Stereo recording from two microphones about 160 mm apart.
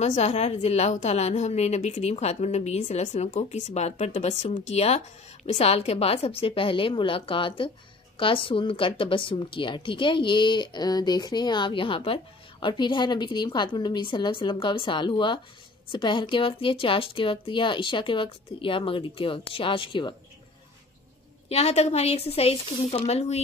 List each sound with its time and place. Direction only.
0.0 s a woman's voice: 45° left (ahead or behind)
21.5 s a woman's voice: 40° left (ahead or behind)